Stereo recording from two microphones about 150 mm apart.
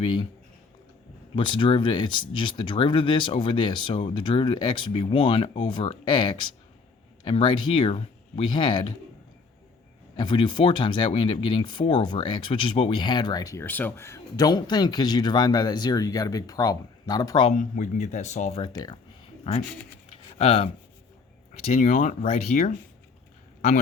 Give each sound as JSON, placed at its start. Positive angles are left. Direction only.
{"t": 0.0, "sound": "speech", "side_deg": 30}
{"t": 1.4, "sound": "speech", "side_deg": 35}
{"t": 10.2, "sound": "speech", "side_deg": 30}
{"t": 17.5, "sound": "speech", "side_deg": 55}
{"t": 18.6, "sound": "speech", "side_deg": 30}
{"t": 20.4, "sound": "speech", "side_deg": 40}